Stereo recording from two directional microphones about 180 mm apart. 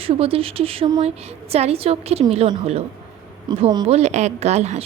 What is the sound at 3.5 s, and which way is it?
Speech, 25° right (ahead or behind).